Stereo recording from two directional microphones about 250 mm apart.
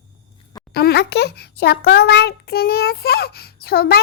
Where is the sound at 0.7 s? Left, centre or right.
Left.